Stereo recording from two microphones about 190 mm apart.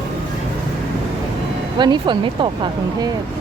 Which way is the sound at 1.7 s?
25° right (ahead or behind).